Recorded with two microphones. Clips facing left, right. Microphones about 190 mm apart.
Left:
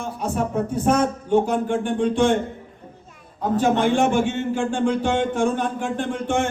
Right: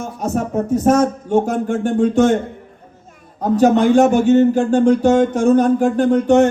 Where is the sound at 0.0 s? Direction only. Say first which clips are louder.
Right 3 dB; 45° right (ahead or behind).